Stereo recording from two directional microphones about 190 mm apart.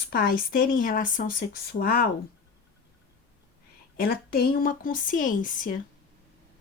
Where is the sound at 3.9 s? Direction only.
55° left (ahead or behind).